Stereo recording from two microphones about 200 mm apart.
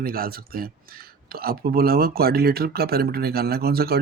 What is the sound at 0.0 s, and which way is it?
Speech, 45° right (ahead or behind).